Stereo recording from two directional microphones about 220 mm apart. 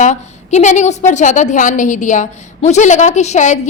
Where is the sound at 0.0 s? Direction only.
30° left (ahead or behind).